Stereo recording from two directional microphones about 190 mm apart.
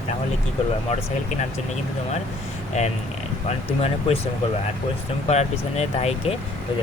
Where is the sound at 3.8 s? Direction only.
35° left (ahead or behind).